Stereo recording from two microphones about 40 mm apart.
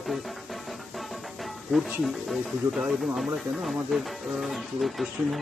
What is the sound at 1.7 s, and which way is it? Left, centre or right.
Speech, centre.